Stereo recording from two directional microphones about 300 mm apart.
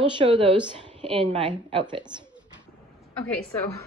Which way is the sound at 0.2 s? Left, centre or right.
Centre.